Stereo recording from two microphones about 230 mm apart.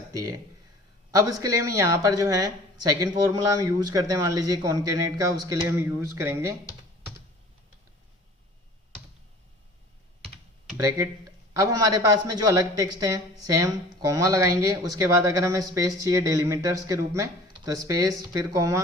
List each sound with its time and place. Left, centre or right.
0.1 s speech: centre
10.8 s speech: centre